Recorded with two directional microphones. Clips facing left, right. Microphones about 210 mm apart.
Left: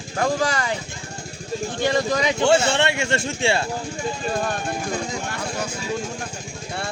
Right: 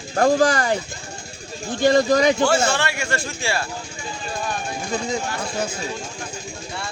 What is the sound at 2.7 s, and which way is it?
Speech, 25° left (ahead or behind).